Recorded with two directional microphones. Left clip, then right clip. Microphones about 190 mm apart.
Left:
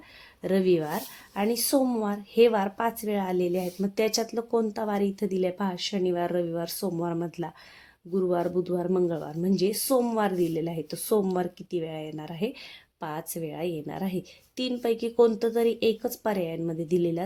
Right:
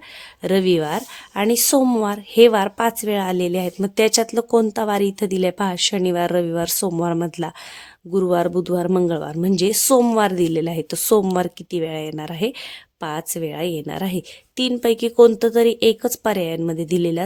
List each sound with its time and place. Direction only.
0.4 s speech: 45° right (ahead or behind)